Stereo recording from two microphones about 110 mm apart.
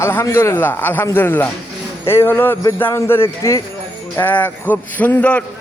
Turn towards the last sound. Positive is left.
turn(degrees=15)  # may be behind; listen again after turning